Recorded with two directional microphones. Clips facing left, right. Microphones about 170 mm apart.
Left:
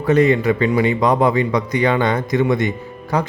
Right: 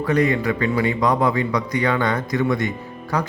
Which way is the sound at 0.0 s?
25° left (ahead or behind).